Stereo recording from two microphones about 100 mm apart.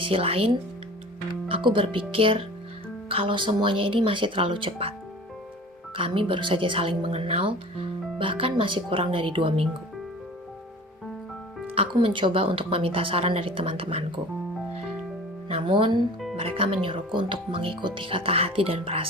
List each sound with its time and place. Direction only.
0.0 s a woman's voice: 65° right (ahead or behind)
6.0 s a woman's voice: 60° right (ahead or behind)
11.7 s speech: 70° right (ahead or behind)
11.9 s a woman's voice: 55° right (ahead or behind)
15.4 s a woman's voice: 65° right (ahead or behind)